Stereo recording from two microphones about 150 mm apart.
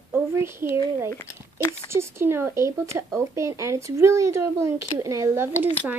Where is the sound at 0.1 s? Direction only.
15° right (ahead or behind).